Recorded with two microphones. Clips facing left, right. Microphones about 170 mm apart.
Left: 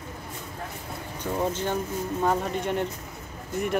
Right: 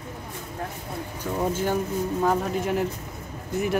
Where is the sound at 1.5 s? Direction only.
10° right (ahead or behind).